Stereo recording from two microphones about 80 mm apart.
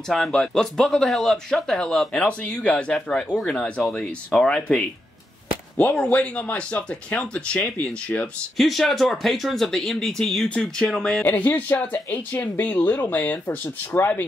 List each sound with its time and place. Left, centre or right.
0.1 s speech: centre
5.8 s speech: centre
8.5 s speech: centre
11.2 s speech: left